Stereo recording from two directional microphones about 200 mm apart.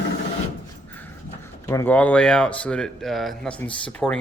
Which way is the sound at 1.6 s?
10° left (ahead or behind).